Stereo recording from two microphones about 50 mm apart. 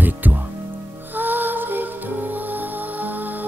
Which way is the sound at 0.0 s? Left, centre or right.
Right.